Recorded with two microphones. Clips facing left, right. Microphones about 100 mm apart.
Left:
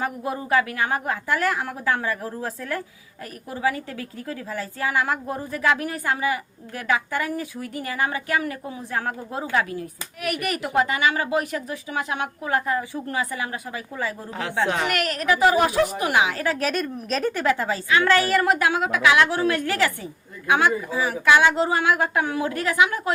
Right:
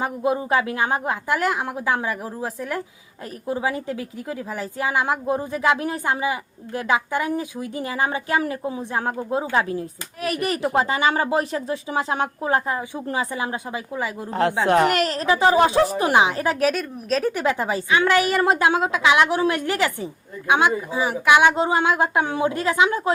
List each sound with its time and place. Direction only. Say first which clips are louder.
0.0 s a woman's voice: right 5 dB; 20° right (ahead or behind)
16.6 s a woman's voice: right 3 dB; 5° right (ahead or behind)
17.3 s a woman's voice: even; 20° right (ahead or behind)